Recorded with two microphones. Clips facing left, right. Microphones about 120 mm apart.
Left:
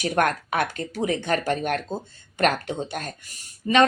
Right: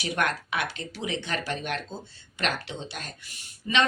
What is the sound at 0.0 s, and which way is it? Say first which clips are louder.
Speech: left 6 dB; 45° left (ahead or behind).